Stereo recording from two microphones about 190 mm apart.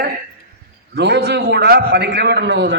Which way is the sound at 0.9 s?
60° right (ahead or behind).